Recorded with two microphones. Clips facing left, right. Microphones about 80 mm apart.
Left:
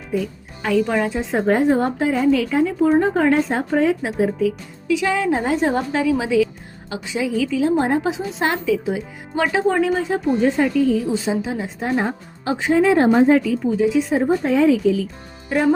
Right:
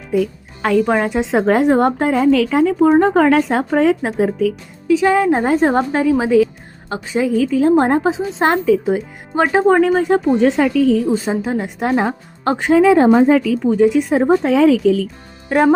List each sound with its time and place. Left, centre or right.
0.1 s speech: right
1.2 s a woman's voice: right
4.9 s a woman's voice: right
8.0 s speech: right
11.1 s a woman's voice: right
12.5 s a woman's voice: right
13.4 s speech: right
13.7 s a woman's voice: right
15.4 s speech: right